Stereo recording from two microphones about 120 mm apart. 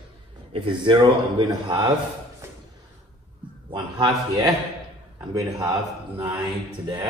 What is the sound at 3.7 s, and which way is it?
Speech, 40° right (ahead or behind).